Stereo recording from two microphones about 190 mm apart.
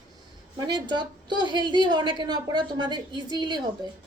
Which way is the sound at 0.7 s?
25° right (ahead or behind).